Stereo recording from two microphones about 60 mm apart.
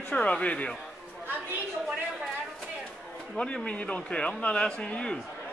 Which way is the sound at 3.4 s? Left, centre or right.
Centre.